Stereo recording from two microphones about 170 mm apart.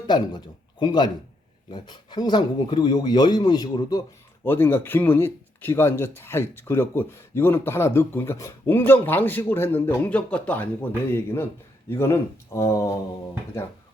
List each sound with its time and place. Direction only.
0.1 s speech: 25° left (ahead or behind)